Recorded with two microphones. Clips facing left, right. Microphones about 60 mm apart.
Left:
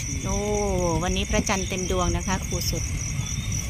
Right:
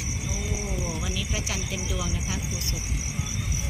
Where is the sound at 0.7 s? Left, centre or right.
Left.